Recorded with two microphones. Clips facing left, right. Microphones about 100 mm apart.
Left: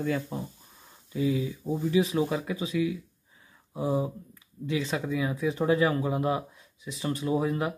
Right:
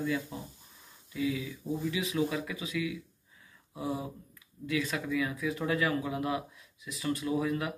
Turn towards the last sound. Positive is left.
turn(degrees=30)  # may be behind; listen again after turning